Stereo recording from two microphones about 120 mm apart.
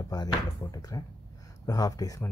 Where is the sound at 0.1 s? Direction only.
35° left (ahead or behind).